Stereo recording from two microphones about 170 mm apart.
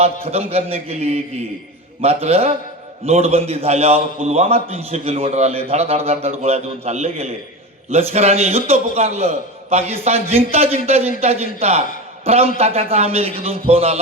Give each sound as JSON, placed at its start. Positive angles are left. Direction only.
{"t": 0.0, "sound": "a man's voice", "side_deg": -35}